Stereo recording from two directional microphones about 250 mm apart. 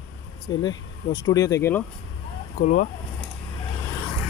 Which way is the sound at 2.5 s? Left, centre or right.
Left.